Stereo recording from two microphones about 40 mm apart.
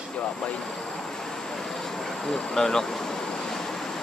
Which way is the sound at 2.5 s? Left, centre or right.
Centre.